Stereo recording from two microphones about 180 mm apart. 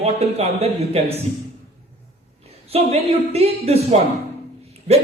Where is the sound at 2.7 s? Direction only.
35° right (ahead or behind).